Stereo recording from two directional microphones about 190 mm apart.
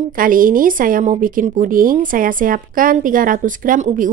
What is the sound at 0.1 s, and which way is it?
Speech, 45° right (ahead or behind).